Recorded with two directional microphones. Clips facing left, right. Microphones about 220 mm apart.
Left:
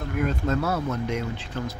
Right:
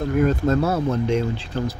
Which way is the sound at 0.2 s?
40° right (ahead or behind).